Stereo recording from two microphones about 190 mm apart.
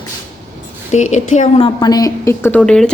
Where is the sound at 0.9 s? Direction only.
40° left (ahead or behind).